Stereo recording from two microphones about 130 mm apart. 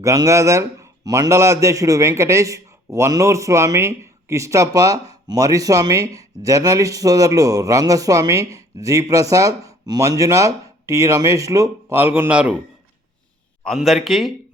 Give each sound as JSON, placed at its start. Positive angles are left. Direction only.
{"t": 0.0, "sound": "a man's voice", "side_deg": -25}
{"t": 13.7, "sound": "speech", "side_deg": 0}